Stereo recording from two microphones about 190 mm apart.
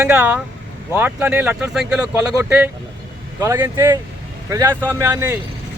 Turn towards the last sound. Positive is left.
turn(degrees=-15)  # may be behind; listen again after turning